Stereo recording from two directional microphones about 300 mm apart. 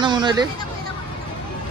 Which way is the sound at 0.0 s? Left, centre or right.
Centre.